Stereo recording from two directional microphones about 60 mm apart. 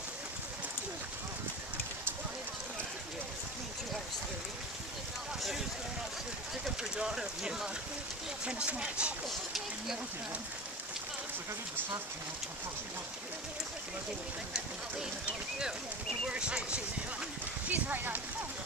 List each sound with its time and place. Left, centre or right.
6.6 s speech: centre
16.3 s speech: centre
17.6 s speech: right